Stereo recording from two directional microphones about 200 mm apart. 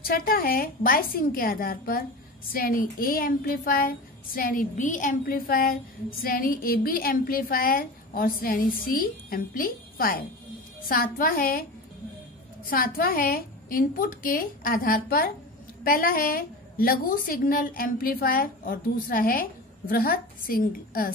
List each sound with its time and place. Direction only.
0.0 s speech: 45° left (ahead or behind)
12.6 s speech: 45° left (ahead or behind)